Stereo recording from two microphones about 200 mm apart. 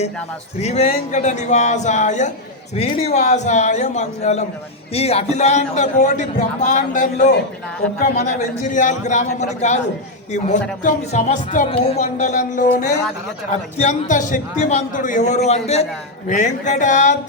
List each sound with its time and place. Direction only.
0.6 s speech: 30° left (ahead or behind)